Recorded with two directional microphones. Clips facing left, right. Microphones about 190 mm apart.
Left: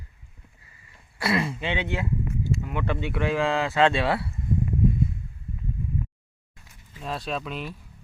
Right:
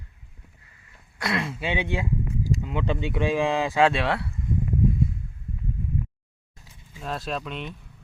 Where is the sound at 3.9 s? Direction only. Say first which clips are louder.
Left 1 dB; centre (ahead or behind).